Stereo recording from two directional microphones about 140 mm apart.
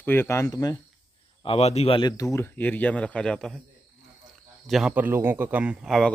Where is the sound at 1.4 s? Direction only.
45° left (ahead or behind).